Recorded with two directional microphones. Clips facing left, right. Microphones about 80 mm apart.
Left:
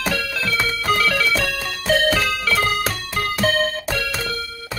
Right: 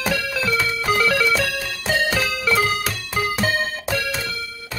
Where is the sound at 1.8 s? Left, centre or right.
Centre.